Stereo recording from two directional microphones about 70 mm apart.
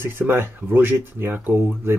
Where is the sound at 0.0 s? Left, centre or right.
Right.